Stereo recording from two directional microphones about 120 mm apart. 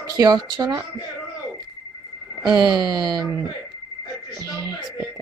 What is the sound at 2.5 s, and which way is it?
Speech, 35° right (ahead or behind).